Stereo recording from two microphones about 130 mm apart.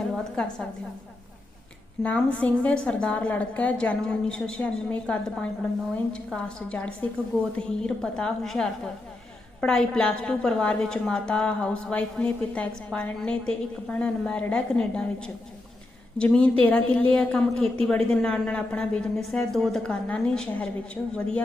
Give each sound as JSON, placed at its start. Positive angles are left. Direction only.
{"t": 0.4, "sound": "a woman's voice", "side_deg": 5}
{"t": 2.0, "sound": "a woman's voice", "side_deg": 10}